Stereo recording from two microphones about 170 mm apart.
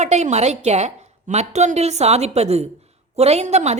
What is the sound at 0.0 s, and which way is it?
A woman's voice, 40° right (ahead or behind).